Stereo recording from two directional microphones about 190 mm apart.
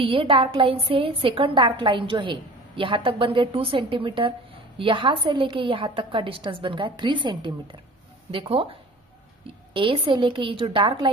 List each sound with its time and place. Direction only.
0.0 s a woman's voice: 30° right (ahead or behind)
9.8 s a woman's voice: 30° right (ahead or behind)